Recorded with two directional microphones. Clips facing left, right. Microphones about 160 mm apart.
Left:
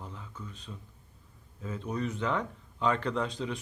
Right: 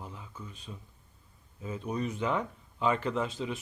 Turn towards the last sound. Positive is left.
turn(degrees=-5)  # may be behind; listen again after turning